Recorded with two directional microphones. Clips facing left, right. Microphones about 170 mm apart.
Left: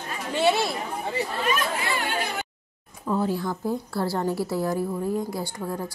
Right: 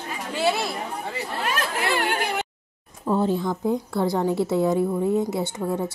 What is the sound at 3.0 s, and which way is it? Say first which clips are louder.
A woman's voice: right 3 dB; 25° right (ahead or behind).